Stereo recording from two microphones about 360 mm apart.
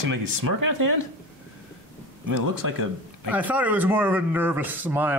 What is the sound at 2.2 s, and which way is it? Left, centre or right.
Speech, right.